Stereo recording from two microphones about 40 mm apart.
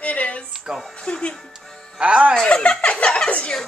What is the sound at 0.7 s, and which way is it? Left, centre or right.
Speech, centre.